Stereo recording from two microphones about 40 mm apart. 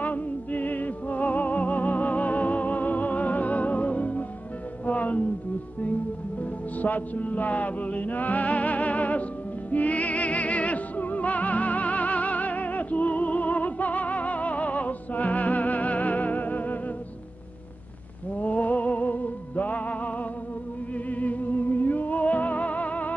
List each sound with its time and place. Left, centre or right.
0.0 s music: left
6.8 s music: left
18.3 s music: left